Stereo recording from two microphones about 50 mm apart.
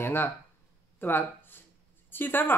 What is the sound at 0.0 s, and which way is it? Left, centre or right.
Speech, left.